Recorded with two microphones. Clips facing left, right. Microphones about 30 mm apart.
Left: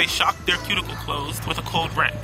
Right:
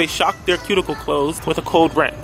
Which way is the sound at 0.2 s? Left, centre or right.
Centre.